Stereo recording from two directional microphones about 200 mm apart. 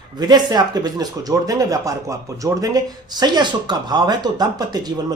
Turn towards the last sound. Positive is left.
turn(degrees=-20)  # may be behind; listen again after turning